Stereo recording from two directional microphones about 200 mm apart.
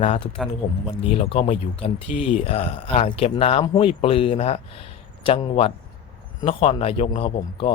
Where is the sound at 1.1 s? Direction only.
30° left (ahead or behind).